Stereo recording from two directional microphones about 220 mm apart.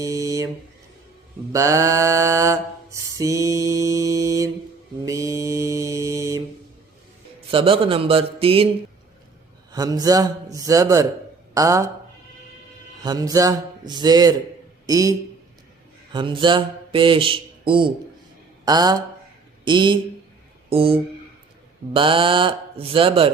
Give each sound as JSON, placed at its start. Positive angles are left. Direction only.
{"t": 0.0, "sound": "a sound", "side_deg": -15}
{"t": 1.5, "sound": "mantra", "side_deg": -15}
{"t": 7.5, "sound": "speech", "side_deg": -25}
{"t": 9.7, "sound": "a man's voice", "side_deg": -15}
{"t": 13.0, "sound": "a man's voice", "side_deg": -15}
{"t": 16.1, "sound": "speech", "side_deg": -20}
{"t": 20.7, "sound": "a sound", "side_deg": -25}
{"t": 21.9, "sound": "speech", "side_deg": -25}